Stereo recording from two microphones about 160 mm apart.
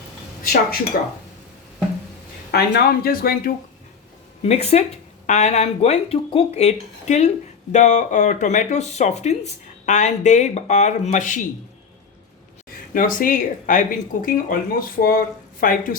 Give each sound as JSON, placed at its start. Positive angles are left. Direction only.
{"t": 0.9, "sound": "speech", "side_deg": 65}
{"t": 2.5, "sound": "speech", "side_deg": 80}
{"t": 4.4, "sound": "speech", "side_deg": 40}
{"t": 12.9, "sound": "speech", "side_deg": 60}